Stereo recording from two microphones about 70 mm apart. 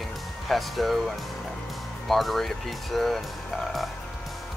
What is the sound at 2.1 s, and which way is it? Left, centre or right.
Speech, centre.